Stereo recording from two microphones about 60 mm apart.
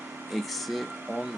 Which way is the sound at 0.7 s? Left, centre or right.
Centre.